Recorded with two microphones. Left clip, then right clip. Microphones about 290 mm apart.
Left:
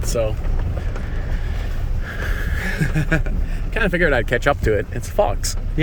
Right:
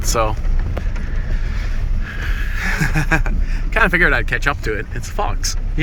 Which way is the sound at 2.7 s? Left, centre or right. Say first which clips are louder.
Right 5 dB; centre.